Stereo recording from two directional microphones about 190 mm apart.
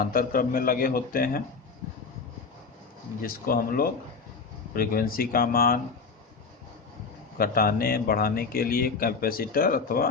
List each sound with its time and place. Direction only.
0.0 s a man's voice: 50° left (ahead or behind)
3.2 s a man's voice: 50° left (ahead or behind)
7.3 s a man's voice: 50° left (ahead or behind)